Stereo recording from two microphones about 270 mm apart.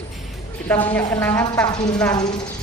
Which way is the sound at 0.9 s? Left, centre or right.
Centre.